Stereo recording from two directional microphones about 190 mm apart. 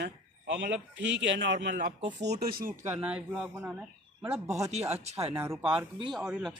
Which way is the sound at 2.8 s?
5° right (ahead or behind).